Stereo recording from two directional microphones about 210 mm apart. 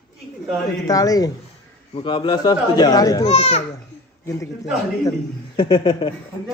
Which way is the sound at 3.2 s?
30° left (ahead or behind).